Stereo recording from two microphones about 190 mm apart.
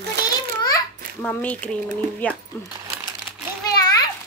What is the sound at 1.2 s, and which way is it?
Speech, 10° left (ahead or behind).